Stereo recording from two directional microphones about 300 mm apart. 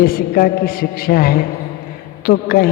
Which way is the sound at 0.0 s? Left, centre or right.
Left.